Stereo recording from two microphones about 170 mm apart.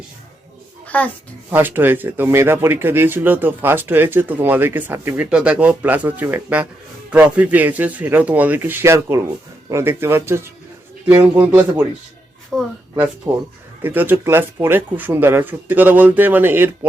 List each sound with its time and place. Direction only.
0.9 s a sound: 10° left (ahead or behind)
1.5 s speech: 10° right (ahead or behind)
12.5 s speech: centre (ahead or behind)
13.2 s speech: 20° right (ahead or behind)